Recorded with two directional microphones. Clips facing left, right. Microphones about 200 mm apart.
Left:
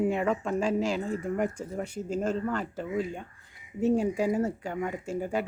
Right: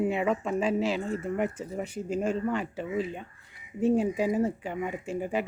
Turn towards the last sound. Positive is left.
turn(degrees=-5)  # may be behind; listen again after turning